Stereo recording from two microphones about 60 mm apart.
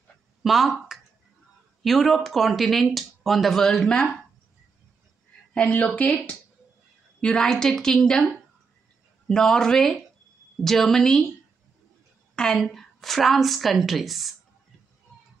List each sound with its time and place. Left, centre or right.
0.4 s speech: centre
5.5 s a woman's voice: centre
9.3 s a woman's voice: centre
12.4 s speech: centre